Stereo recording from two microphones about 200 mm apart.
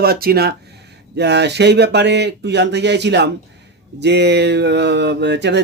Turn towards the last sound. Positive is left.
turn(degrees=-60)  # may be behind; listen again after turning